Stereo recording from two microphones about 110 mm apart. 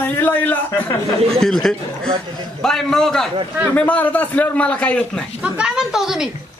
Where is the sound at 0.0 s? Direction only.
15° left (ahead or behind).